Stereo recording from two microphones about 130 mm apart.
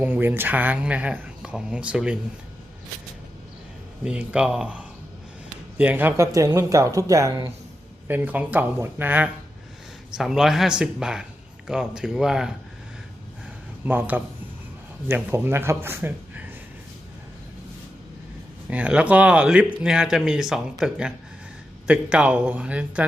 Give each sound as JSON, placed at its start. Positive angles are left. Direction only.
{"t": 0.0, "sound": "speech", "side_deg": -15}
{"t": 4.0, "sound": "speech", "side_deg": -5}
{"t": 8.0, "sound": "speech", "side_deg": -15}
{"t": 13.8, "sound": "speech", "side_deg": -15}
{"t": 18.7, "sound": "speech", "side_deg": -10}